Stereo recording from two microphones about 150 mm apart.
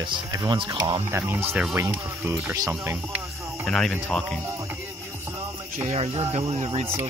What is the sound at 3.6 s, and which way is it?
Speech, 5° left (ahead or behind).